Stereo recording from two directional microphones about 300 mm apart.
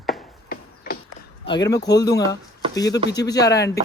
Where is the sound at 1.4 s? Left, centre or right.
Centre.